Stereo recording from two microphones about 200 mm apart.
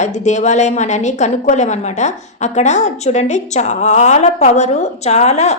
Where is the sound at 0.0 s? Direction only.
35° left (ahead or behind).